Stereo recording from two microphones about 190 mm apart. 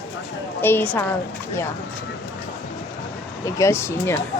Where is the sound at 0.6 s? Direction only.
10° left (ahead or behind).